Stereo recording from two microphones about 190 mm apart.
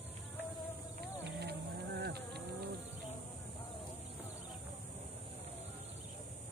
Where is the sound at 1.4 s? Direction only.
60° right (ahead or behind).